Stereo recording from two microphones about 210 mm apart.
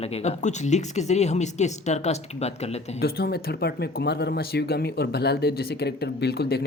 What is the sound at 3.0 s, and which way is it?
Speech, 50° left (ahead or behind).